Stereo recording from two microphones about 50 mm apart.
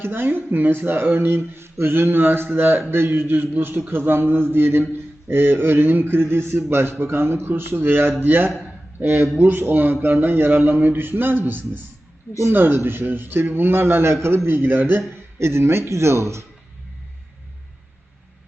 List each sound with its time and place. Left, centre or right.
0.0 s a man's voice: right
15.4 s speech: right